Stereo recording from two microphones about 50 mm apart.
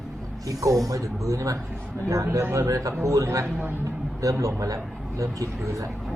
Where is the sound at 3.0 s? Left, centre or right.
Right.